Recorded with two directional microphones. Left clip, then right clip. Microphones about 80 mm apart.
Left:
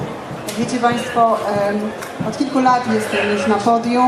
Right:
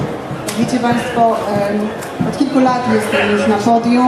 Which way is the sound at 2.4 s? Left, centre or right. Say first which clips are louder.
Right 1 dB; left.